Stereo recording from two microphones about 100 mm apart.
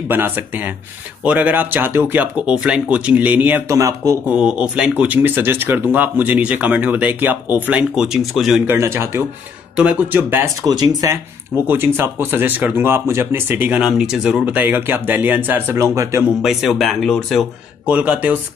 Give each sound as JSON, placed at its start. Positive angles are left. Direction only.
{"t": 0.1, "sound": "speech", "side_deg": -20}
{"t": 3.6, "sound": "speech", "side_deg": -30}
{"t": 4.3, "sound": "speech", "side_deg": -10}
{"t": 8.6, "sound": "speech", "side_deg": -25}
{"t": 9.8, "sound": "speech", "side_deg": -10}
{"t": 10.6, "sound": "speech", "side_deg": -40}
{"t": 11.6, "sound": "speech", "side_deg": -20}
{"t": 16.4, "sound": "speech", "side_deg": 0}
{"t": 17.8, "sound": "speech", "side_deg": -10}